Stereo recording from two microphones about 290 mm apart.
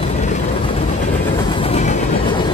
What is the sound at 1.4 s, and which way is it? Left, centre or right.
Train, centre.